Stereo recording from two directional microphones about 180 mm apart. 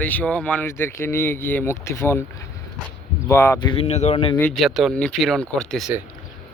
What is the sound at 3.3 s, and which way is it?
Speech, 15° left (ahead or behind).